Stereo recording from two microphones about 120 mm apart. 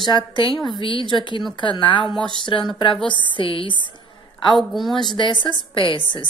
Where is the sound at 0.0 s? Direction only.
40° left (ahead or behind).